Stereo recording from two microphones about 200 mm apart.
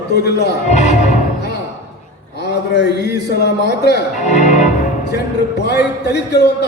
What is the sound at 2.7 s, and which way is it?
Speech, 55° left (ahead or behind).